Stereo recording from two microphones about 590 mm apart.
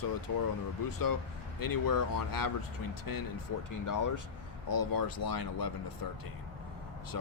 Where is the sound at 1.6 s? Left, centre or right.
Left.